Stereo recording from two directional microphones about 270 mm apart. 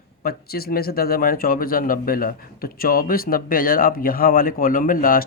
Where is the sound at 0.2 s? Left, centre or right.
Left.